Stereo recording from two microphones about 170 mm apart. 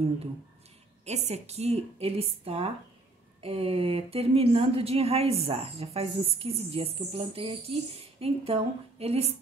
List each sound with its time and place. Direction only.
1.0 s a woman's voice: 40° right (ahead or behind)